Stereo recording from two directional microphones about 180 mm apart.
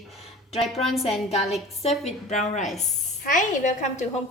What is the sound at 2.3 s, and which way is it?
A woman's voice, 40° left (ahead or behind).